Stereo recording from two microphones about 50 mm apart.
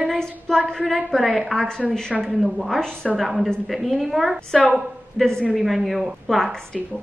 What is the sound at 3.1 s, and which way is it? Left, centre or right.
A woman's voice, centre.